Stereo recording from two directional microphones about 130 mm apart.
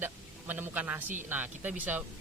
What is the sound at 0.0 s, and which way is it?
A man's voice, 15° right (ahead or behind).